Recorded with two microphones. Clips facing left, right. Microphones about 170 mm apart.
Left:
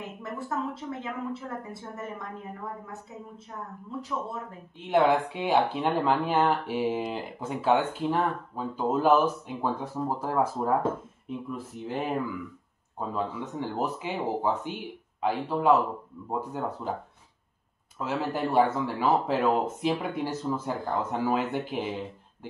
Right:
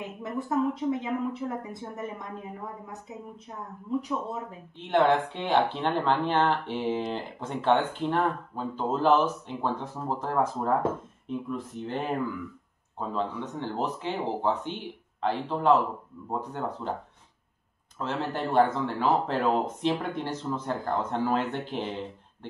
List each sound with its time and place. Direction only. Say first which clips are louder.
0.2 s a woman's voice: right 6 dB; 15° right (ahead or behind)
4.0 s a woman's voice: right 2 dB; 15° right (ahead or behind)
4.7 s speech: even; 10° left (ahead or behind)
13.1 s speech: right 1 dB; 10° left (ahead or behind)
17.9 s speech: left 1 dB; 10° left (ahead or behind)